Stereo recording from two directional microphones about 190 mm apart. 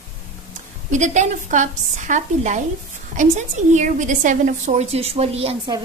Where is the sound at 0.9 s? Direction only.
40° right (ahead or behind).